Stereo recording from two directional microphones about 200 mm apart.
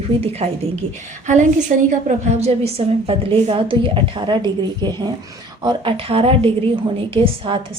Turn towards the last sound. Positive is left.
turn(degrees=-25)  # may be behind; listen again after turning